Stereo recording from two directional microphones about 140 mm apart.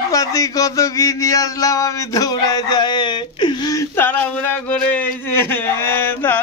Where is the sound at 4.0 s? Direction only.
15° left (ahead or behind).